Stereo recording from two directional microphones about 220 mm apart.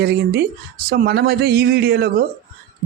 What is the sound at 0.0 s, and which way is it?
A woman's voice, 50° right (ahead or behind).